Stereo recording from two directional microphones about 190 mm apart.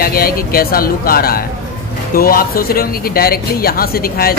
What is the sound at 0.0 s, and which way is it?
Speech, 50° left (ahead or behind).